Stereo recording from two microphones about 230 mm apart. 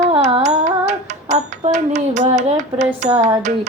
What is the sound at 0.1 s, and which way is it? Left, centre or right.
Carnatic music, right.